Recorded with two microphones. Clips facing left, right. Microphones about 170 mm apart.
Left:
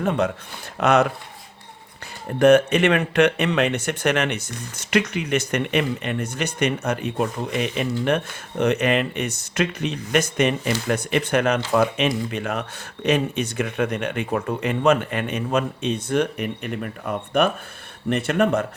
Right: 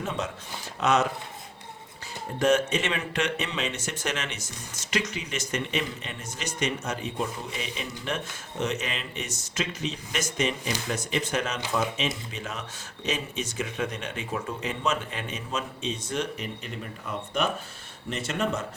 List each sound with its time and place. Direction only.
0.0 s speech: 60° left (ahead or behind)
2.4 s speech: 60° left (ahead or behind)